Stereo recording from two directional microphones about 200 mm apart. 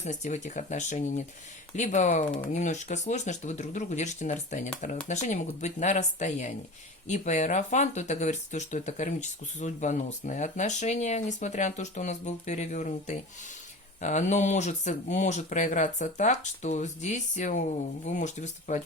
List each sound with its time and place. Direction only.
0.0 s speech: 35° left (ahead or behind)